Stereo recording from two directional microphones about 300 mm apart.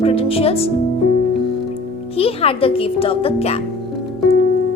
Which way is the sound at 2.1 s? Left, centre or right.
Centre.